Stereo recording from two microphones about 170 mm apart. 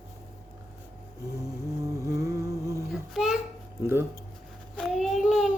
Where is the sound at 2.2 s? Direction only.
20° right (ahead or behind).